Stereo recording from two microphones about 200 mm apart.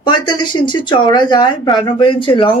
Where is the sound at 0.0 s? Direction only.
20° left (ahead or behind).